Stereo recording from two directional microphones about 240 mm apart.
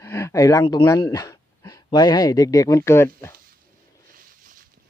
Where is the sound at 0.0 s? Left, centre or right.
Centre.